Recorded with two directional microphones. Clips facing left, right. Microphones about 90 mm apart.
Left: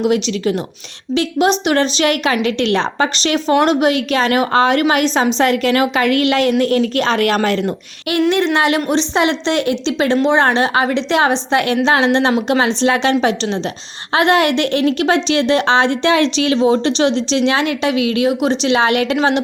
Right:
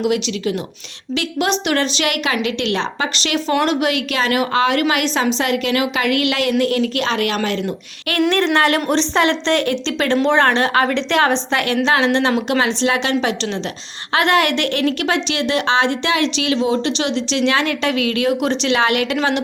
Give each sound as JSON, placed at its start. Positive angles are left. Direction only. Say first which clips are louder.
{"t": 0.0, "sound": "a woman's voice", "louder": "left 3 dB", "side_deg": 35}
{"t": 3.5, "sound": "a woman's voice", "louder": "left 4 dB", "side_deg": 25}
{"t": 8.3, "sound": "a woman's voice", "louder": "even", "side_deg": 5}